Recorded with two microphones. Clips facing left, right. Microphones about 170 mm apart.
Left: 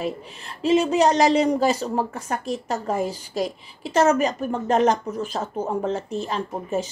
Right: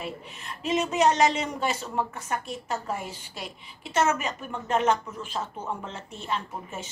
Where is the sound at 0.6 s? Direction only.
35° left (ahead or behind).